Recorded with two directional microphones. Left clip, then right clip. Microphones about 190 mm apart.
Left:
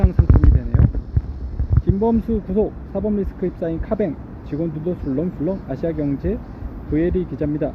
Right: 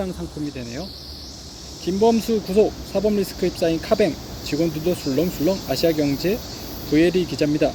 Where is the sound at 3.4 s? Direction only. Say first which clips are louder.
Right 3 dB; 10° right (ahead or behind).